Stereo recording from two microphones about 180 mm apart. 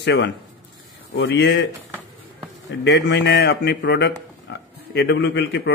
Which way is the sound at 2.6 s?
75° left (ahead or behind).